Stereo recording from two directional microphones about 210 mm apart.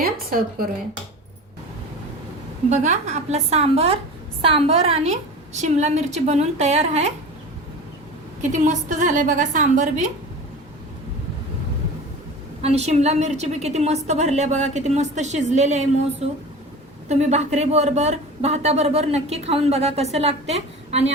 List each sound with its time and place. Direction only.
0.0 s a woman's voice: 45° right (ahead or behind)
2.6 s a woman's voice: 35° right (ahead or behind)
8.4 s a woman's voice: 35° right (ahead or behind)
12.6 s a woman's voice: 30° right (ahead or behind)